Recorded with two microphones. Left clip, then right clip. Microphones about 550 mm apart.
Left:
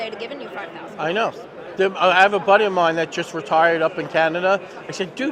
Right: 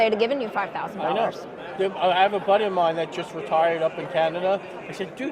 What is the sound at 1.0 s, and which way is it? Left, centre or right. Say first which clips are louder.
A man's voice: left 3 dB; left.